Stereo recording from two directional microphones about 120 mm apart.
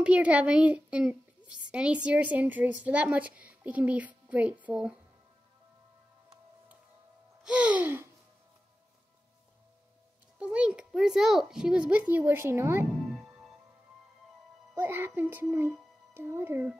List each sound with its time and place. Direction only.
0.0 s a woman's voice: 10° right (ahead or behind)
7.4 s a woman's voice: 10° right (ahead or behind)
10.4 s a woman's voice: 10° right (ahead or behind)
13.1 s music: 5° right (ahead or behind)
14.8 s a woman's voice: 15° right (ahead or behind)